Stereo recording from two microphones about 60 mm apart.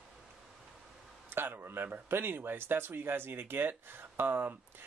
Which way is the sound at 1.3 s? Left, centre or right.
Right.